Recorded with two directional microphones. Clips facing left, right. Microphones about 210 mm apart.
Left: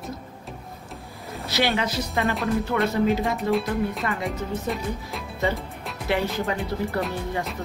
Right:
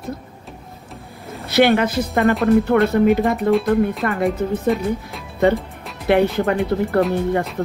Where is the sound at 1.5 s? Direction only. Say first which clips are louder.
Right 9 dB; 55° right (ahead or behind).